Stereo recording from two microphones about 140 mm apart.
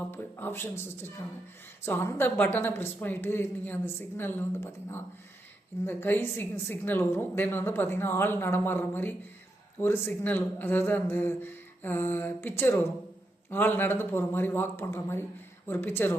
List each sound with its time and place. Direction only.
0.1 s a woman's voice: 15° left (ahead or behind)